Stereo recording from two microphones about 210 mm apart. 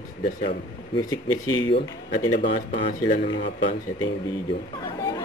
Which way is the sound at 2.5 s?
30° left (ahead or behind).